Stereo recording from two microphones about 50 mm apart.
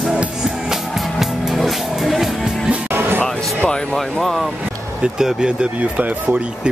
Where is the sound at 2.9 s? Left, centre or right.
Right.